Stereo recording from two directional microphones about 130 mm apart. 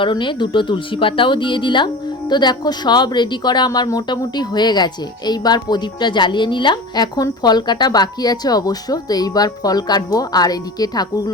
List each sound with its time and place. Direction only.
0.0 s a woman's voice: 40° left (ahead or behind)